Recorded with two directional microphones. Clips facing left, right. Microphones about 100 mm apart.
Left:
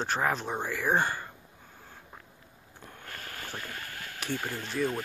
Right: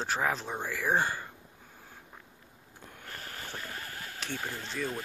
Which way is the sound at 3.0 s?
20° right (ahead or behind).